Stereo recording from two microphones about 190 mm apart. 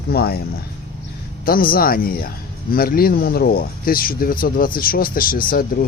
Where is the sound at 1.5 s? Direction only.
50° left (ahead or behind).